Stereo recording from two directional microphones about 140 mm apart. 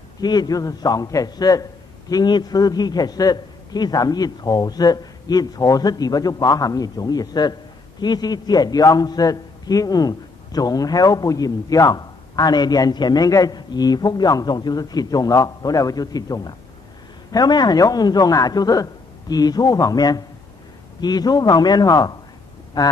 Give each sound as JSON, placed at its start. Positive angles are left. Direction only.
{"t": 0.2, "sound": "a man's voice", "side_deg": 30}